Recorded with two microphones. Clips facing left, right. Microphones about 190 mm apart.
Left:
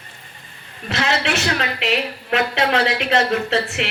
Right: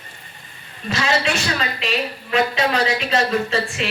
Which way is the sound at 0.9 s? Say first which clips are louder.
Even; 65° left (ahead or behind).